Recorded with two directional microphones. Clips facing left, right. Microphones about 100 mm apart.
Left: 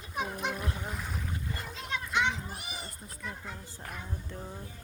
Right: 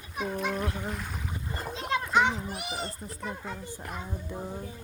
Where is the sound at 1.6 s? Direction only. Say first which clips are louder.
Right 11 dB; 40° right (ahead or behind).